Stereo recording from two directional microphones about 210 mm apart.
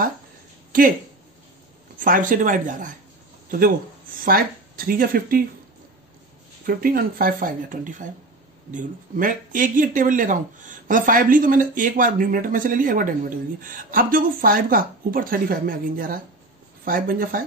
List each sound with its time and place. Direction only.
2.0 s speech: 40° right (ahead or behind)
6.6 s speech: 45° right (ahead or behind)